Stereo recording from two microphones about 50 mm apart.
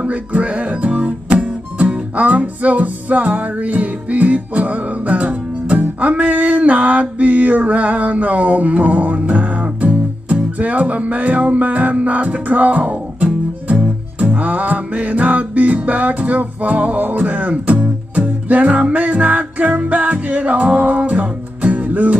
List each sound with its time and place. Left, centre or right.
0.0 s music: right